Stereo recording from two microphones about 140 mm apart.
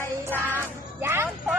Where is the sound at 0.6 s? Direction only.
15° right (ahead or behind).